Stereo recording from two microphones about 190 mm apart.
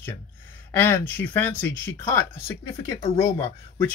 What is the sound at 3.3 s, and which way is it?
Speech, 35° left (ahead or behind).